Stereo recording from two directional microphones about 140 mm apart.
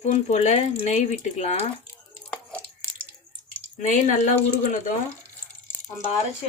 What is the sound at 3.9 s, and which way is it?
Speech, 60° left (ahead or behind).